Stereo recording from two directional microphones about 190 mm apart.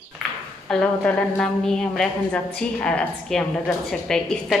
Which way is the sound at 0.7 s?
5° left (ahead or behind).